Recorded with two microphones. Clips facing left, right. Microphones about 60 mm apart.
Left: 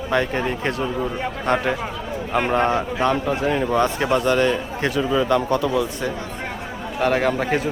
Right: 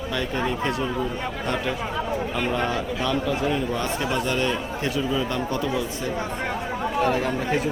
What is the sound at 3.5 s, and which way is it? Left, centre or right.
Speech, left.